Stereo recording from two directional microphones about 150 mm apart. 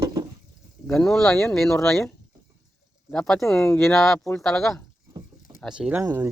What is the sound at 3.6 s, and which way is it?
Speech, 15° left (ahead or behind).